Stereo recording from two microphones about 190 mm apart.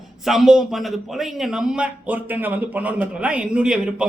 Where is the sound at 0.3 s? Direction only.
Centre (ahead or behind).